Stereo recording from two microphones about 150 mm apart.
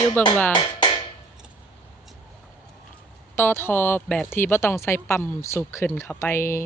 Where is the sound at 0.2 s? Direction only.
10° left (ahead or behind).